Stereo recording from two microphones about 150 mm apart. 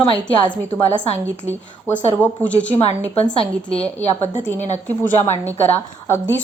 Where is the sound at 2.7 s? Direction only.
45° left (ahead or behind).